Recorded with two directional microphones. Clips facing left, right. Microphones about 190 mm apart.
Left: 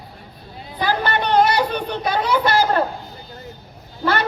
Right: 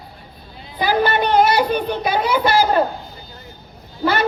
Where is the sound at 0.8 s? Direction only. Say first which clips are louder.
Right 4 dB; 10° right (ahead or behind).